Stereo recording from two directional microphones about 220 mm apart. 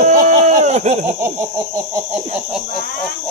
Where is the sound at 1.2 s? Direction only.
15° right (ahead or behind).